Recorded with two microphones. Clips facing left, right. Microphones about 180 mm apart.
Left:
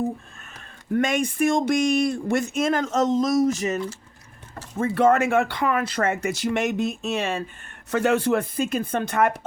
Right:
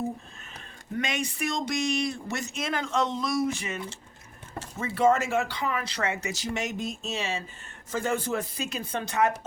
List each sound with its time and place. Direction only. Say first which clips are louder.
0.9 s speech: left 9 dB; 50° left (ahead or behind)
4.8 s speech: left 5 dB; 60° left (ahead or behind)
7.9 s speech: left 8 dB; 70° left (ahead or behind)